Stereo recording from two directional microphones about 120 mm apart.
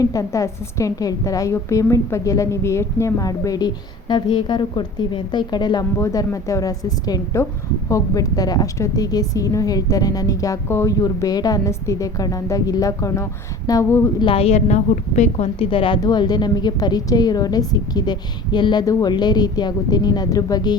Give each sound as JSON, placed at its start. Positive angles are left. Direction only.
{"t": 0.0, "sound": "a woman's voice", "side_deg": 30}
{"t": 14.2, "sound": "a woman's voice", "side_deg": 50}
{"t": 15.7, "sound": "a woman's voice", "side_deg": 45}
{"t": 16.0, "sound": "a woman's voice", "side_deg": 35}